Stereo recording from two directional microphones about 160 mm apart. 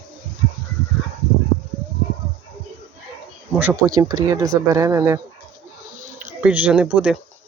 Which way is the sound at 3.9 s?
25° right (ahead or behind).